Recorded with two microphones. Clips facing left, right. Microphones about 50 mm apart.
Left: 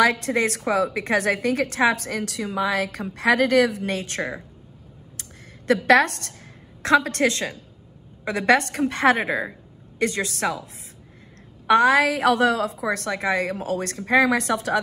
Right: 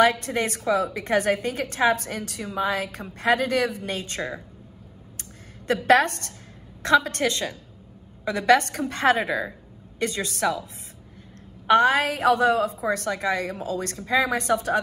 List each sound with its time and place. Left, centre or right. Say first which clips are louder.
0.0 s a woman's voice: left 1 dB; left
5.7 s a woman's voice: left 2 dB; left